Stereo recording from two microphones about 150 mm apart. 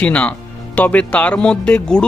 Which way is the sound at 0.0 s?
10° left (ahead or behind).